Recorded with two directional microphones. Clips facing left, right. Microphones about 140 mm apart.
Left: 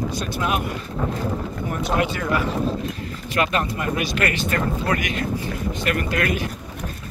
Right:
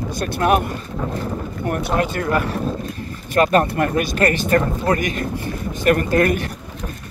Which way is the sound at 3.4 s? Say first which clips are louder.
Right 7 dB; 45° right (ahead or behind).